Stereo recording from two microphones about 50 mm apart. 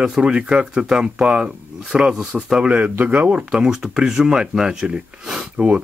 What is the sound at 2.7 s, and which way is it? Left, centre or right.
Speech, right.